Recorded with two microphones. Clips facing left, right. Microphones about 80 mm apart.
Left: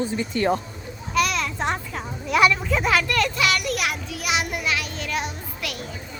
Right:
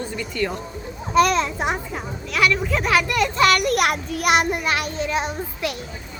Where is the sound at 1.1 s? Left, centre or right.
Right.